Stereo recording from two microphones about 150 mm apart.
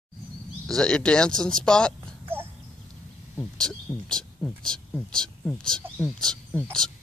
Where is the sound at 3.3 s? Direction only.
5° left (ahead or behind).